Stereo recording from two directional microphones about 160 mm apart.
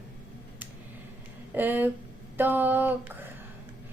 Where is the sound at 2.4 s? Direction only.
10° right (ahead or behind).